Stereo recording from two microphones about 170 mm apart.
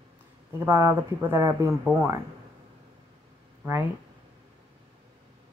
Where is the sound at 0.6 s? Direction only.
15° right (ahead or behind).